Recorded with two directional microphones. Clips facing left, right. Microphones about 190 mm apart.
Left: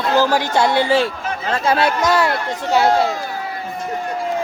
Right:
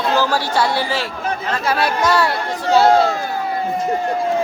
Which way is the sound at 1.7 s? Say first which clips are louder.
Left 1 dB; 25° left (ahead or behind).